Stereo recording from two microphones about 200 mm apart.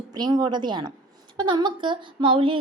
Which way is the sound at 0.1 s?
20° right (ahead or behind).